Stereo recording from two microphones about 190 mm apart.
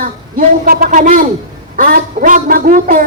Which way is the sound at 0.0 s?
50° right (ahead or behind).